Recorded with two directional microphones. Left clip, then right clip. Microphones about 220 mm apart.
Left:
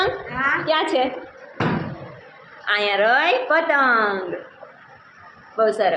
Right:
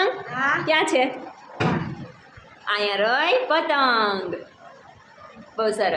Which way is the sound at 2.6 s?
5° left (ahead or behind).